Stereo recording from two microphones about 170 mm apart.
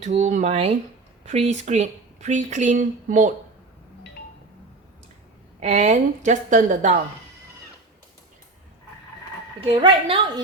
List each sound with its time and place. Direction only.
0.0 s a woman's voice: 40° right (ahead or behind)
5.5 s a woman's voice: 45° right (ahead or behind)
9.6 s a woman's voice: 30° right (ahead or behind)